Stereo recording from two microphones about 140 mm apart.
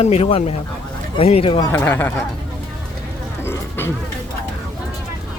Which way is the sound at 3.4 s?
15° left (ahead or behind).